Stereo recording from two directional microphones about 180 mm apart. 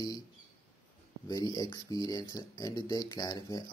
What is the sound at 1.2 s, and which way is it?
Speech, 20° left (ahead or behind).